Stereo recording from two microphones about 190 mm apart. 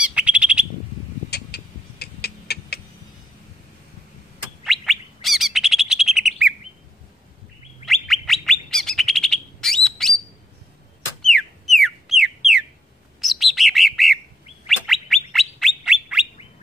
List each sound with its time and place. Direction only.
0.0 s bird: 5° right (ahead or behind)
1.3 s a sound: 60° left (ahead or behind)
4.6 s chirp: centre (ahead or behind)
7.8 s bird: centre (ahead or behind)
11.2 s chicken: centre (ahead or behind)
13.2 s bird: centre (ahead or behind)